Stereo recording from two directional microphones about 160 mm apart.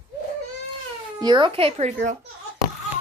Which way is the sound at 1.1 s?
25° right (ahead or behind).